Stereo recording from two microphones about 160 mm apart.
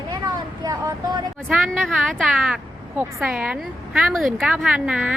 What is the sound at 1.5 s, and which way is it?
Speech, centre (ahead or behind).